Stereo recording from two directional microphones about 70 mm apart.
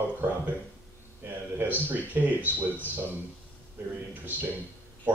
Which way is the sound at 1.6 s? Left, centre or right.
Right.